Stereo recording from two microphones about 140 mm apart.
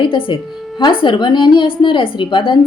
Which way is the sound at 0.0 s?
35° left (ahead or behind).